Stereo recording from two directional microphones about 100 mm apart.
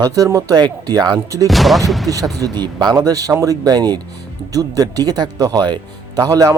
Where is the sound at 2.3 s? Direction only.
40° right (ahead or behind).